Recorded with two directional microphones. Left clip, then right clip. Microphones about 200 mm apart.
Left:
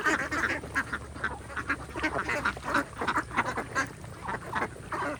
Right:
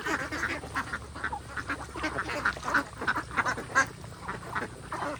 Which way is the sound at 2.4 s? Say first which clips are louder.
Right 1 dB; 45° left (ahead or behind).